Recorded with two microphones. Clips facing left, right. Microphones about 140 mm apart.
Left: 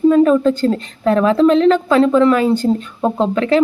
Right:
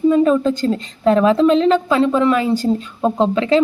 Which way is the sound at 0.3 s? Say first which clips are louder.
Left 2 dB; 20° right (ahead or behind).